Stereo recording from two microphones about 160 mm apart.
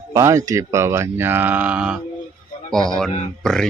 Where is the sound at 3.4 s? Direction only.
5° left (ahead or behind).